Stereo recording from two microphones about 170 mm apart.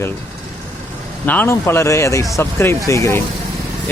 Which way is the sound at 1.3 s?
10° left (ahead or behind).